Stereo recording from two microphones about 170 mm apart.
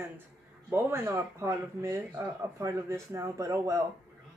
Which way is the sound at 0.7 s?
15° right (ahead or behind).